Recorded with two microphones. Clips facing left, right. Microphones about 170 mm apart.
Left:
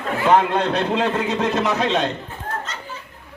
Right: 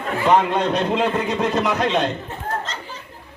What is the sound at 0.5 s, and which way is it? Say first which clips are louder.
Speech: even; 15° right (ahead or behind).